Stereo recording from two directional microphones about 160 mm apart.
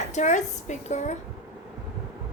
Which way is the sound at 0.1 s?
50° left (ahead or behind).